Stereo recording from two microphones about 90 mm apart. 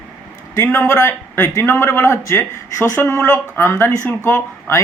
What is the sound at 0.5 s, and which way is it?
A man's voice, 25° left (ahead or behind).